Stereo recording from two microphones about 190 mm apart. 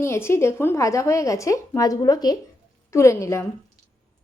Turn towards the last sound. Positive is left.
turn(degrees=15)  # may be behind; listen again after turning